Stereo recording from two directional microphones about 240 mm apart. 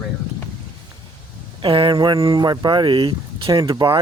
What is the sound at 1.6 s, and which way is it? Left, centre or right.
Speech, right.